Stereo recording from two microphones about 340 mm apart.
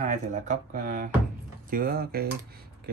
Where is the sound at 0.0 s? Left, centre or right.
Right.